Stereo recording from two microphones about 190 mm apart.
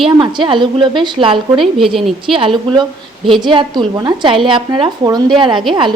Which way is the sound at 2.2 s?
30° right (ahead or behind).